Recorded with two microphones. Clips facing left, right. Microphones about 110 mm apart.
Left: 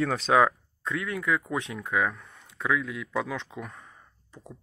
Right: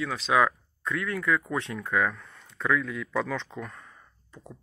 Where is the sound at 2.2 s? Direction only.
25° left (ahead or behind).